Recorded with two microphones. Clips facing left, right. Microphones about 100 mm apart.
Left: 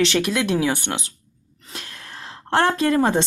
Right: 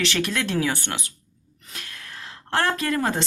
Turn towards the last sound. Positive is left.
turn(degrees=25)  # may be behind; listen again after turning